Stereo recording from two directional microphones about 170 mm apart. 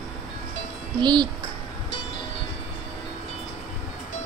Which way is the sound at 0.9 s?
25° right (ahead or behind).